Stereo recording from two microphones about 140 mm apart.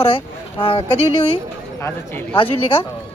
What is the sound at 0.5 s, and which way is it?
Speech, 40° left (ahead or behind).